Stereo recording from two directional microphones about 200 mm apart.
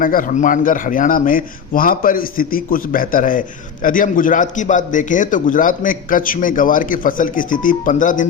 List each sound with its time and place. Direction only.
0.0 s a man's voice: 45° left (ahead or behind)